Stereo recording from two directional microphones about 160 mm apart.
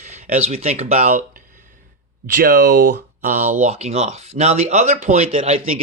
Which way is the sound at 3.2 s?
50° right (ahead or behind).